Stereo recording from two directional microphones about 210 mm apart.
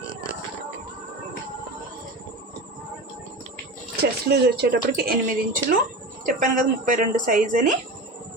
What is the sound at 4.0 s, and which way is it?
Speech, 50° right (ahead or behind).